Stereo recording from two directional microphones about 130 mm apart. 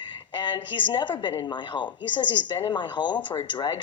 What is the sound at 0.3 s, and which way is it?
A woman's voice, 35° left (ahead or behind).